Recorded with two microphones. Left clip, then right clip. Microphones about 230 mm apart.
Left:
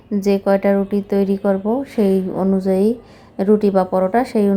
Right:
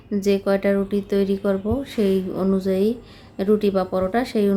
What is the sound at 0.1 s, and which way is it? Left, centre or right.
A woman's voice, centre.